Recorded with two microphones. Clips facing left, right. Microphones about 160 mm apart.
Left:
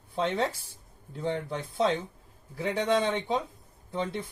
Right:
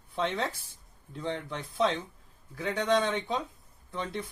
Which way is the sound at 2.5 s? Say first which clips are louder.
Left 1 dB; 30° left (ahead or behind).